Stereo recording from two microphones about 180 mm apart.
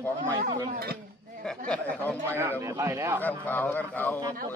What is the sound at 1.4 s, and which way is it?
Speech, 5° left (ahead or behind).